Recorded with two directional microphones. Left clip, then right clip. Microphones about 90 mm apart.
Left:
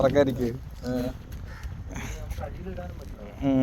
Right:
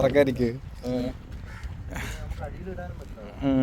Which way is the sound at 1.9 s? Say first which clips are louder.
Right 3 dB; 30° right (ahead or behind).